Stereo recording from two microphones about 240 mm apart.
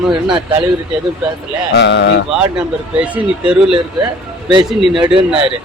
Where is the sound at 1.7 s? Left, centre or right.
Left.